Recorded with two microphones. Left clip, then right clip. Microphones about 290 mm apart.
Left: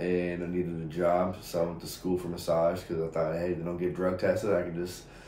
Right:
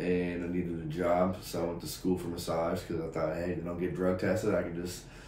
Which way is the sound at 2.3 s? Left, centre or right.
Centre.